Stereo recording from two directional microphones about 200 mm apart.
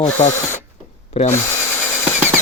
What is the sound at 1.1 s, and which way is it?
Speech, 30° left (ahead or behind).